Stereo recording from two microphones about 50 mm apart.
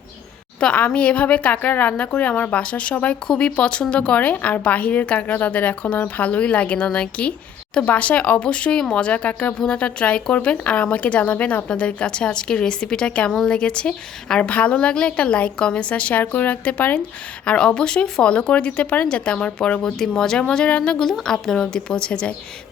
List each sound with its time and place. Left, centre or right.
0.6 s speech: left
9.6 s speech: centre
21.0 s speech: centre